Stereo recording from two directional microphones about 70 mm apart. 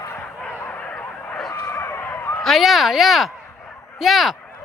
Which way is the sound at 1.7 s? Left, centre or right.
Left.